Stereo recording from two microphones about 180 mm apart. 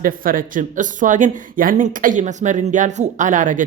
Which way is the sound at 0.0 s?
50° right (ahead or behind).